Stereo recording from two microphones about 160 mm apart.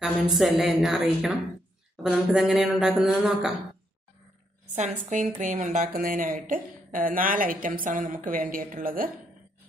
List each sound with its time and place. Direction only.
0.0 s speech: centre (ahead or behind)
4.7 s a woman's voice: 45° right (ahead or behind); by 9.1 s 60° right (ahead or behind)